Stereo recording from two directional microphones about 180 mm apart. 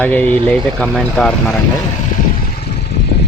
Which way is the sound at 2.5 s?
65° left (ahead or behind).